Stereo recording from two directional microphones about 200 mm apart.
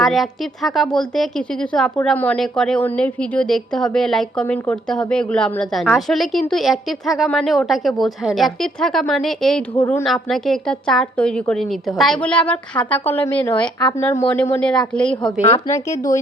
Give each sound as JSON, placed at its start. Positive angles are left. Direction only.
{"t": 0.0, "sound": "a woman's voice", "side_deg": 0}
{"t": 15.4, "sound": "speech", "side_deg": 30}
{"t": 15.6, "sound": "speech", "side_deg": 15}